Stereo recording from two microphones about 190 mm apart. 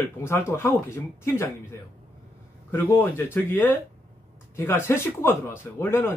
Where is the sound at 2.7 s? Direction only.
10° left (ahead or behind).